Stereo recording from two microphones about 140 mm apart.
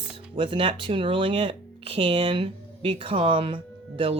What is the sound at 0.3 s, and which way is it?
Speech, 40° right (ahead or behind).